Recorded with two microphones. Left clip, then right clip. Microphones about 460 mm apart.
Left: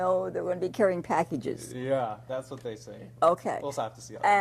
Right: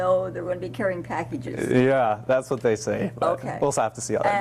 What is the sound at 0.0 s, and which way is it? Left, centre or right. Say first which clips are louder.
A woman's voice: right 4 dB; left.